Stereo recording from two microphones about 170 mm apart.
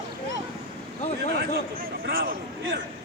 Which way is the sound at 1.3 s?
70° right (ahead or behind).